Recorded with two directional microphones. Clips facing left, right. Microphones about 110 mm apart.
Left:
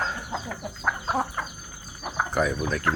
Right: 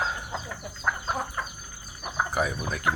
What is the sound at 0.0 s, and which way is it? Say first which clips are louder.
Chicken: left 1 dB; 5° right (ahead or behind).